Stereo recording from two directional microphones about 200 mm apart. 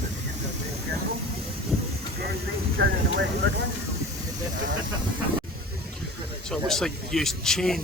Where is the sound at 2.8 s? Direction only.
55° right (ahead or behind).